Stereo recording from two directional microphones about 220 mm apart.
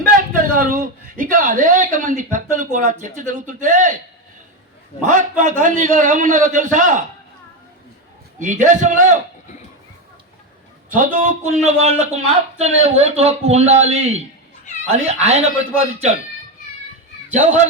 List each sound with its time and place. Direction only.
0.0 s a man's voice: 40° right (ahead or behind)
5.4 s a man's voice: 35° right (ahead or behind)
8.4 s a man's voice: 35° right (ahead or behind)
10.8 s a man's voice: 35° right (ahead or behind)
17.3 s a man's voice: 35° right (ahead or behind)